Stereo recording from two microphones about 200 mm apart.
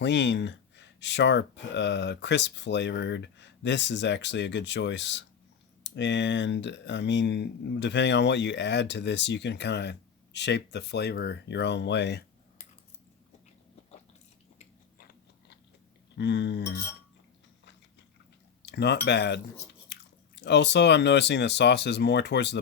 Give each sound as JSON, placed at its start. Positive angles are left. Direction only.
{"t": 0.0, "sound": "speech", "side_deg": 60}
{"t": 14.6, "sound": "biting", "side_deg": 45}
{"t": 16.1, "sound": "speech", "side_deg": 60}
{"t": 18.6, "sound": "speech", "side_deg": 55}